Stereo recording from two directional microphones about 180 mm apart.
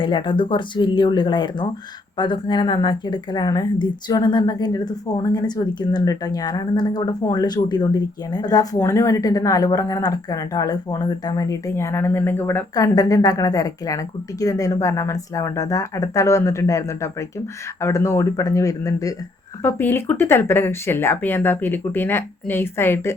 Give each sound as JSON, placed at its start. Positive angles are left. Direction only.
{"t": 0.0, "sound": "a woman's voice", "side_deg": 25}